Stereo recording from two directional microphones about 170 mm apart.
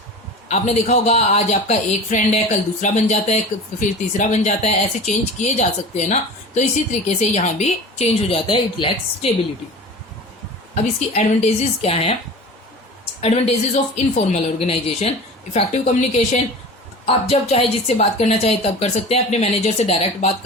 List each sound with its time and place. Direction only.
0.4 s a woman's voice: 40° left (ahead or behind)
11.1 s a woman's voice: 40° left (ahead or behind)
13.2 s a woman's voice: 40° left (ahead or behind)